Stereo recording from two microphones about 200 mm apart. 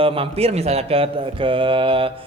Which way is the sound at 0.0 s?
25° right (ahead or behind).